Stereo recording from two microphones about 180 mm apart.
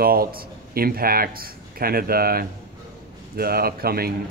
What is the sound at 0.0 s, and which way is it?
Speech, 55° right (ahead or behind).